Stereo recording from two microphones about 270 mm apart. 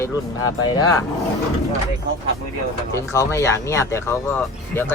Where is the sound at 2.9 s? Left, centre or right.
Centre.